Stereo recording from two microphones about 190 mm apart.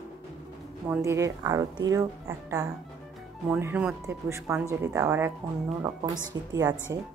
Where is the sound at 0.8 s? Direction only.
15° right (ahead or behind).